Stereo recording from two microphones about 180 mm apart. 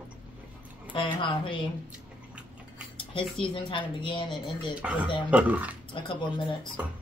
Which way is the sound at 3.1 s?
30° left (ahead or behind).